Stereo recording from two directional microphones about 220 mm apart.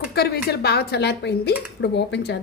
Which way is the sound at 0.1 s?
45° left (ahead or behind).